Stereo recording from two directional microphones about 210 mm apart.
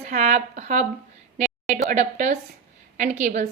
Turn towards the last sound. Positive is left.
turn(degrees=-35)  # may be behind; listen again after turning